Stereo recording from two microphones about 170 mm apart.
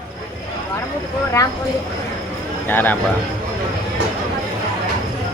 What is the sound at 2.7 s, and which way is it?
Speech, 10° left (ahead or behind).